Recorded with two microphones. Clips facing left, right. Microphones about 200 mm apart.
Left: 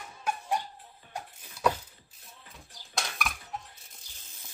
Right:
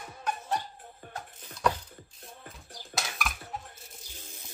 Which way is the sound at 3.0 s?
Centre (ahead or behind).